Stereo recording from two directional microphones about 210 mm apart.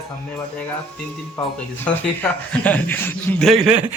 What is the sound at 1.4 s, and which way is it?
Speech, 5° left (ahead or behind).